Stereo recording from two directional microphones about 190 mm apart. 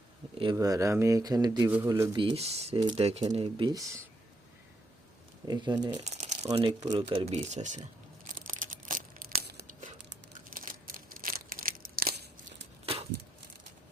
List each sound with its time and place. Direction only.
0.3 s speech: 20° right (ahead or behind)
5.5 s speech: 20° right (ahead or behind)
6.1 s speech: 40° right (ahead or behind)
8.4 s tearing: 45° right (ahead or behind)
10.5 s a sound: 45° right (ahead or behind)
12.8 s a sound: 30° right (ahead or behind)